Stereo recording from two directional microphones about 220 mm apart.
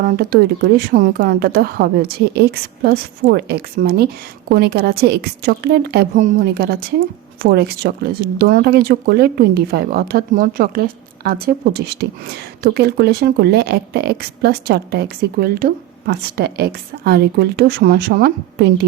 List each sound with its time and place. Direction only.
0.0 s speech: 45° right (ahead or behind)